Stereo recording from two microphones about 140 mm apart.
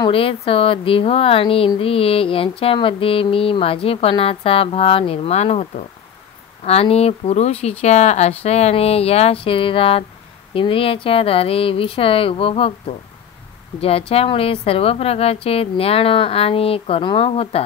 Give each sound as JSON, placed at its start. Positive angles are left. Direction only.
{"t": 0.0, "sound": "a woman's voice", "side_deg": 40}